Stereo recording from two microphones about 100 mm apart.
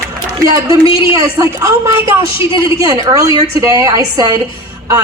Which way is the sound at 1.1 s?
35° right (ahead or behind).